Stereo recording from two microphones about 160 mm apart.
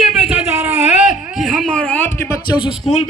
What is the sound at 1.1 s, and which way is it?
A man's voice, centre (ahead or behind).